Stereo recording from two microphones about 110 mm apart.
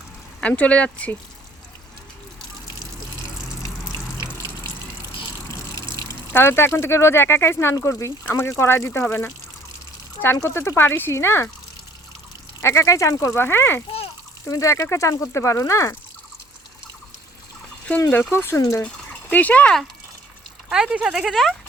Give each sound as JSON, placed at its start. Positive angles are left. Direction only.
{"t": 0.4, "sound": "speech", "side_deg": 10}
{"t": 4.2, "sound": "water", "side_deg": 30}
{"t": 6.3, "sound": "speech", "side_deg": 20}
{"t": 10.3, "sound": "speech", "side_deg": 25}
{"t": 12.6, "sound": "speech", "side_deg": 25}
{"t": 18.1, "sound": "speech", "side_deg": 20}
{"t": 18.8, "sound": "speech", "side_deg": 10}
{"t": 20.7, "sound": "speech", "side_deg": -5}